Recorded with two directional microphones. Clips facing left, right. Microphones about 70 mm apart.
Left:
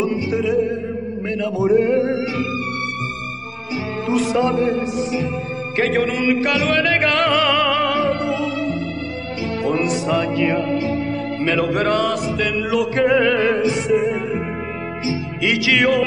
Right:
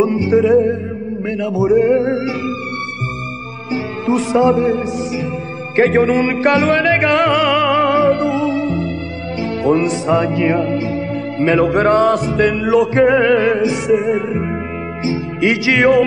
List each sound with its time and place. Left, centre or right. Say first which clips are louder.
0.0 s music: right 7 dB; right
1.2 s music: right 3 dB; centre
3.7 s music: right 3 dB; right
5.8 s music: right 7 dB; right